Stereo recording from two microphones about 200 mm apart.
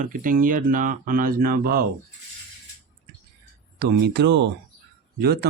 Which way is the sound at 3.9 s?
55° right (ahead or behind).